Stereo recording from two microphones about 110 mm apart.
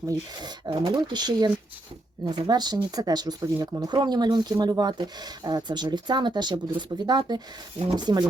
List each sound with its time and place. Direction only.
0.1 s speech: 40° right (ahead or behind)